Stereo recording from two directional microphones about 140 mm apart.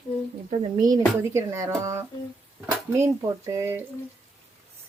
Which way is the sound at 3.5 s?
15° right (ahead or behind).